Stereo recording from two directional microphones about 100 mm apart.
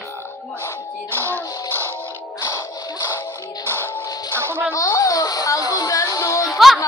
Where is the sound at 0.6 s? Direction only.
20° left (ahead or behind).